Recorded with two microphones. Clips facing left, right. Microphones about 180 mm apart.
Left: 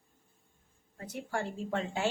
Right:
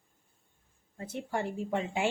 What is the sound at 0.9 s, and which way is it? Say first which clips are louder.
Speech: right 2 dB; 25° right (ahead or behind).